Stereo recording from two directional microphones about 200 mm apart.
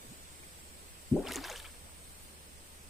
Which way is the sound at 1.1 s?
Centre (ahead or behind).